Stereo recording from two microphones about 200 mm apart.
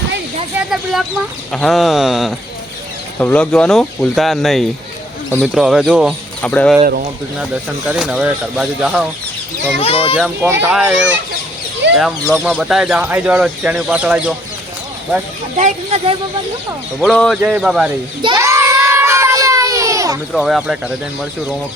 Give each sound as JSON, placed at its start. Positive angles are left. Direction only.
{"t": 1.5, "sound": "speech", "side_deg": 0}
{"t": 7.3, "sound": "speech", "side_deg": -5}
{"t": 9.8, "sound": "speech", "side_deg": 30}
{"t": 10.2, "sound": "speech", "side_deg": -5}
{"t": 11.8, "sound": "a sound", "side_deg": -60}
{"t": 12.3, "sound": "speech", "side_deg": 0}
{"t": 15.5, "sound": "speech", "side_deg": -35}
{"t": 17.0, "sound": "speech", "side_deg": 0}
{"t": 18.2, "sound": "a sound", "side_deg": -20}
{"t": 20.3, "sound": "speech", "side_deg": 0}